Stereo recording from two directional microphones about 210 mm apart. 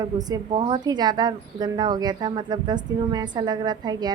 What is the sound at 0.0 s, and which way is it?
Speech, 20° right (ahead or behind).